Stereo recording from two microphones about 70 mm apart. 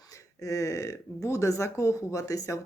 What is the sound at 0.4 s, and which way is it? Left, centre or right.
Speech, left.